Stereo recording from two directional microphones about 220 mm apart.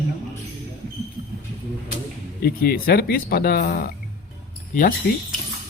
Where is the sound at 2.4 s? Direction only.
45° left (ahead or behind).